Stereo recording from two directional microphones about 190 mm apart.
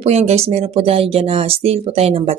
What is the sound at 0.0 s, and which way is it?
Speech, 35° right (ahead or behind).